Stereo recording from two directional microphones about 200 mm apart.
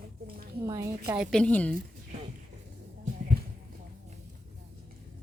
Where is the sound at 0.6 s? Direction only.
15° right (ahead or behind).